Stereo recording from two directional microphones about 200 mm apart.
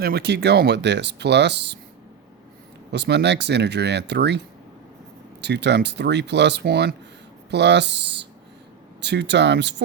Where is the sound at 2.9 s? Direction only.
60° right (ahead or behind).